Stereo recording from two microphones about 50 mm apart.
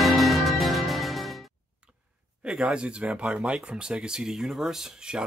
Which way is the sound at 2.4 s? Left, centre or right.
Centre.